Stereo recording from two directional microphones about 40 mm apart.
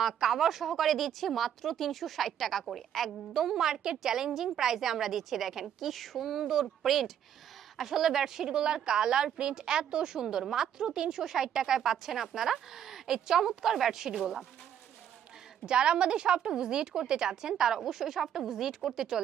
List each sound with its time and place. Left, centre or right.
0.0 s a woman's voice: centre
15.6 s a woman's voice: right